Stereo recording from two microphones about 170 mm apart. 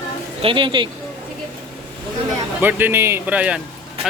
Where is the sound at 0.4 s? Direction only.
30° right (ahead or behind).